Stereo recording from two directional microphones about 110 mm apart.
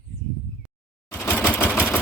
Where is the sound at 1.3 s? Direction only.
20° left (ahead or behind).